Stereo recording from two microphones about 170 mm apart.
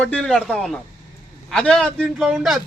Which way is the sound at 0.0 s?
5° left (ahead or behind).